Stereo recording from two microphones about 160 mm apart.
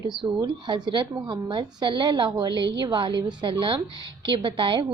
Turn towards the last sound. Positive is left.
turn(degrees=-30)  # may be behind; listen again after turning